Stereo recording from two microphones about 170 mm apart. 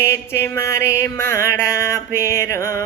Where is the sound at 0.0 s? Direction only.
15° left (ahead or behind).